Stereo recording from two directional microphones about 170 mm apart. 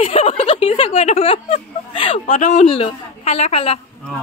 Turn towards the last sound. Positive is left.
turn(degrees=35)  # may be behind; listen again after turning